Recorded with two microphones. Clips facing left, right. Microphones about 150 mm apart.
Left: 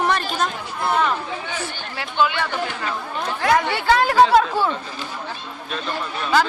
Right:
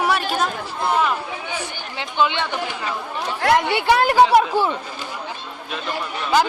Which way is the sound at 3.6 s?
20° right (ahead or behind).